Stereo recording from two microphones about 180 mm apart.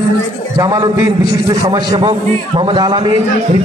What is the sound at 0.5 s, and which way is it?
A man's voice, 20° right (ahead or behind).